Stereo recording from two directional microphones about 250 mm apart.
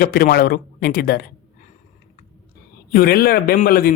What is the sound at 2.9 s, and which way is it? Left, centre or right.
Speech, left.